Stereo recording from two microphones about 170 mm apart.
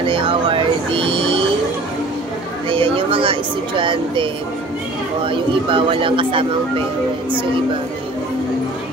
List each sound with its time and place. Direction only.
0.0 s music: 30° right (ahead or behind)
2.7 s music: 30° right (ahead or behind)
5.2 s a man's voice: 30° right (ahead or behind)